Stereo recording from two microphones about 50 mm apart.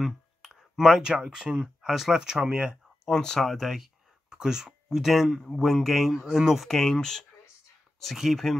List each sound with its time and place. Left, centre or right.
0.0 s a sound: centre
0.7 s speech: centre
1.0 s speech: centre
1.6 s speech: centre
3.1 s speech: centre
4.3 s speech: centre
6.2 s speech: centre
6.7 s speech: centre
8.0 s speech: centre